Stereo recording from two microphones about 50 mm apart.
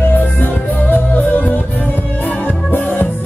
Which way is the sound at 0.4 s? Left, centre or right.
Left.